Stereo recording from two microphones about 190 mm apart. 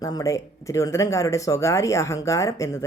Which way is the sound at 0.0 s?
20° left (ahead or behind).